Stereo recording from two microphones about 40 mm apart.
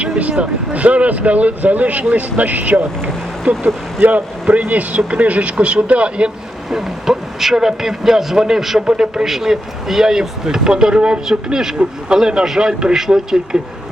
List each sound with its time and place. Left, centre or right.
0.2 s speech: right
6.7 s a man's voice: centre
8.9 s speech: centre
9.2 s a man's voice: centre